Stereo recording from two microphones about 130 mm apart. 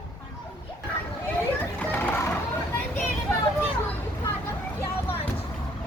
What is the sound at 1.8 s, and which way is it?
Children playing, 15° left (ahead or behind).